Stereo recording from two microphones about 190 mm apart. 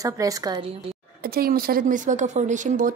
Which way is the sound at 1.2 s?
50° right (ahead or behind).